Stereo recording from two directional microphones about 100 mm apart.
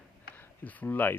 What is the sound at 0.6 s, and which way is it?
Speech, 15° left (ahead or behind).